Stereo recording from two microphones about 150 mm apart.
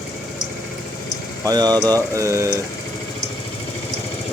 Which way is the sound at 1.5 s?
25° right (ahead or behind).